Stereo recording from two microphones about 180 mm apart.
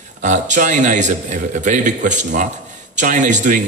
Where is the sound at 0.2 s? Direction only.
45° right (ahead or behind).